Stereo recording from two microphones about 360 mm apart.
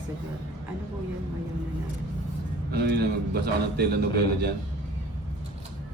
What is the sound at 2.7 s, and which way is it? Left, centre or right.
A man's voice, right.